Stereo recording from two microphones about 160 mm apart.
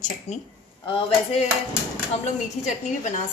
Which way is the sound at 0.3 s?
40° left (ahead or behind).